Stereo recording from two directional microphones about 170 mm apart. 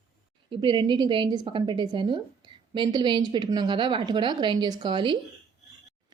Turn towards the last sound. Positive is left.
turn(degrees=-30)  # may be behind; listen again after turning